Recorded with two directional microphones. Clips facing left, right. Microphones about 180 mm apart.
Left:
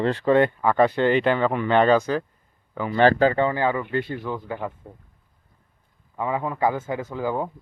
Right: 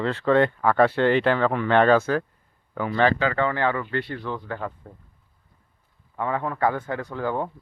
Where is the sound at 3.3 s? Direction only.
15° left (ahead or behind).